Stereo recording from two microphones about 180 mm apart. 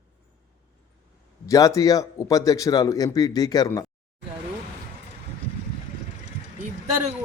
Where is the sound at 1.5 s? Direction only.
20° left (ahead or behind).